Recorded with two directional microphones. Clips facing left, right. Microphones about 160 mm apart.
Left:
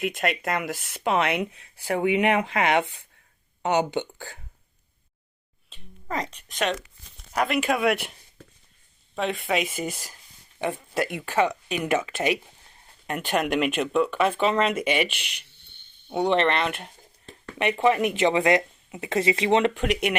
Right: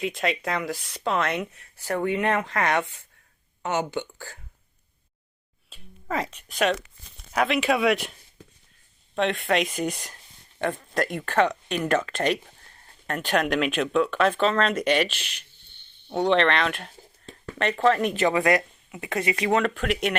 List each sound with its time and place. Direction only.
0.0 s speech: 5° left (ahead or behind)
1.0 s speech: 15° left (ahead or behind)
5.7 s a sound: 5° right (ahead or behind)
6.5 s speech: 10° right (ahead or behind)
9.1 s speech: centre (ahead or behind)